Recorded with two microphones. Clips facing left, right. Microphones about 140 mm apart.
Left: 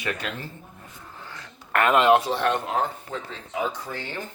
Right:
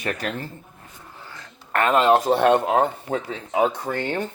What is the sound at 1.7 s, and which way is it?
Speech, 30° right (ahead or behind).